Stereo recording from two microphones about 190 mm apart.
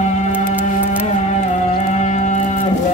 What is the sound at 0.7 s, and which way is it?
Music, 40° left (ahead or behind).